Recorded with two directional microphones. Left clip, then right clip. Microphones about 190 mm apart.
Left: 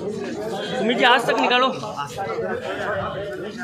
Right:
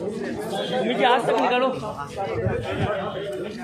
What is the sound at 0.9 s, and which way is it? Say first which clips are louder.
Speech: left 3 dB; 45° left (ahead or behind).